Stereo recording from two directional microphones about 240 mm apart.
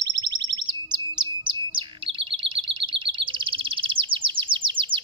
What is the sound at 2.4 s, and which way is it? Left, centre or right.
Chirp, right.